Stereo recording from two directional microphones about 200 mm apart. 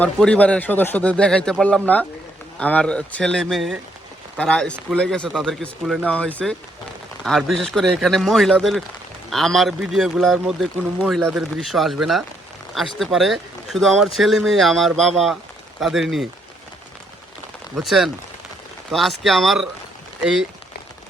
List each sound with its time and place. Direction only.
0.0 s a man's voice: 5° left (ahead or behind)
17.7 s speech: centre (ahead or behind)